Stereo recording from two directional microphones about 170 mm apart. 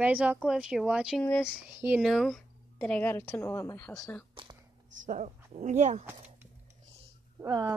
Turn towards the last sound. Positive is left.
turn(degrees=-25)  # may be behind; listen again after turning